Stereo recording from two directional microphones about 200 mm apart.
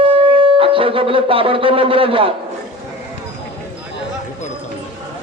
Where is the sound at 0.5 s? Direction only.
25° right (ahead or behind).